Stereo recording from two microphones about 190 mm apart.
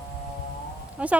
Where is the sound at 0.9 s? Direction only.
5° right (ahead or behind).